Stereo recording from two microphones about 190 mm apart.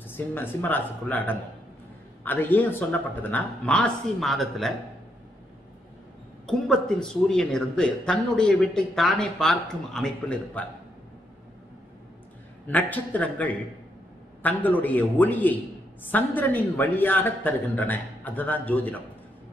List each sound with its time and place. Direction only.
0.0 s speech: 10° left (ahead or behind)
6.4 s speech: centre (ahead or behind)
12.6 s speech: 10° left (ahead or behind)